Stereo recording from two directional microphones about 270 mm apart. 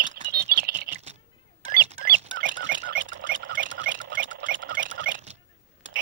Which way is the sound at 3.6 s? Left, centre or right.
Right.